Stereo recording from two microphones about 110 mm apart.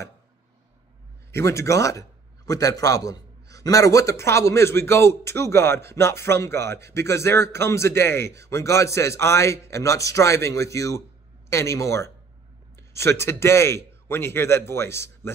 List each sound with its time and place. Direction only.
1.3 s a man's voice: 25° left (ahead or behind)